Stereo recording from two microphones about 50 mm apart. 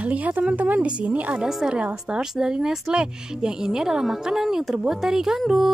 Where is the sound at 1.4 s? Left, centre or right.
Centre.